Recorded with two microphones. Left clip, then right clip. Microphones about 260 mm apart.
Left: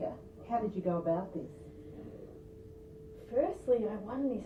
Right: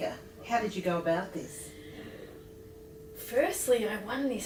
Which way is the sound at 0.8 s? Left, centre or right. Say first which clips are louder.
Right 3 dB; centre.